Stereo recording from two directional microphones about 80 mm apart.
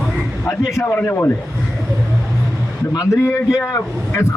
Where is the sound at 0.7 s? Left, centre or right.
Left.